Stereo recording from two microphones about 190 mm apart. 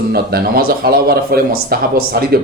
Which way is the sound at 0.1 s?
55° right (ahead or behind).